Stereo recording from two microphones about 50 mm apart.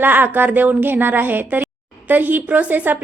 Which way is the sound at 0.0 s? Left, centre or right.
Right.